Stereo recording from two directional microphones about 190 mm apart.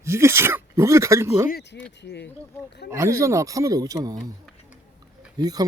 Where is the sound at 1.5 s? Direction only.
55° left (ahead or behind).